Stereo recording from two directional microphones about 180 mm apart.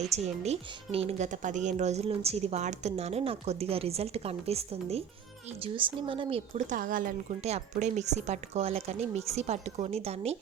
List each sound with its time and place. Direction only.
0.0 s speech: 35° right (ahead or behind)
6.7 s speech: 50° right (ahead or behind)